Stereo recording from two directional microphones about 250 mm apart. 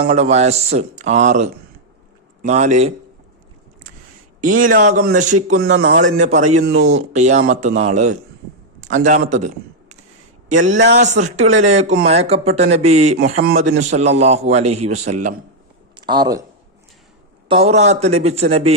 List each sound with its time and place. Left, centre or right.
0.0 s speech: right
4.4 s a man's voice: right
6.7 s speech: right
7.1 s speech: right
10.5 s speech: right
16.0 s speech: centre
17.5 s speech: right